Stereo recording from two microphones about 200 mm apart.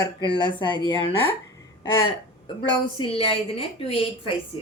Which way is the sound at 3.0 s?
30° left (ahead or behind).